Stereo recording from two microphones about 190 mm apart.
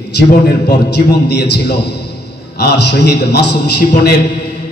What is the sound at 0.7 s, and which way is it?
A man's voice, 60° left (ahead or behind).